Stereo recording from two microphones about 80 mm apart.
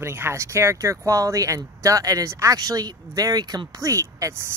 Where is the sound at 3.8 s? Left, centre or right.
Right.